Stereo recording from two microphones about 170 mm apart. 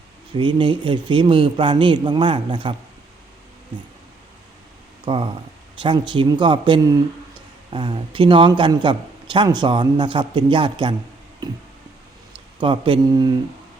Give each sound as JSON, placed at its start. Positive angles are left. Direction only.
{"t": 0.3, "sound": "speech", "side_deg": -30}
{"t": 5.0, "sound": "speech", "side_deg": -30}